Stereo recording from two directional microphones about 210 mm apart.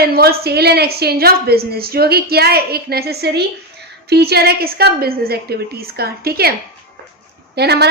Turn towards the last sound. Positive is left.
turn(degrees=-50)  # may be behind; listen again after turning